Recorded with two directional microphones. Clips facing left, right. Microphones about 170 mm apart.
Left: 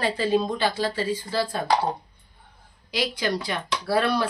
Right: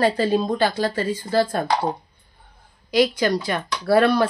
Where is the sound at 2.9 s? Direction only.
45° right (ahead or behind).